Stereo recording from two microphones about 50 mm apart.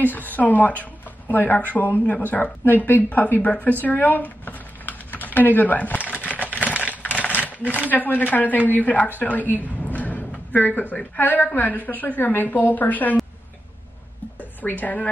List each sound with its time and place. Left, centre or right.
0.4 s a woman's voice: left
3.8 s typing: left
6.2 s a sound: left
7.0 s a woman's voice: left
9.8 s a sound: left
11.1 s a woman's voice: left
14.6 s a woman's voice: left